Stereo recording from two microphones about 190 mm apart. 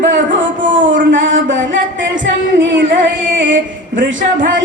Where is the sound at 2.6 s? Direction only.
75° right (ahead or behind).